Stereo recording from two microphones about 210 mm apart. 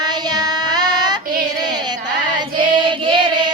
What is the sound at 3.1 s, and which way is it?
Child singing, 20° right (ahead or behind).